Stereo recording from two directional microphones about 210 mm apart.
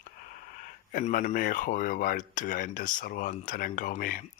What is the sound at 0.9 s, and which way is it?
Speech, 40° left (ahead or behind).